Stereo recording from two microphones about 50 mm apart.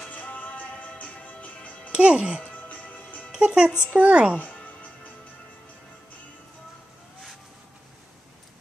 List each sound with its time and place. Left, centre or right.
0.1 s music: left
1.9 s speech: right
2.7 s music: left
3.3 s music: centre
3.9 s a woman's voice: right
4.4 s music: left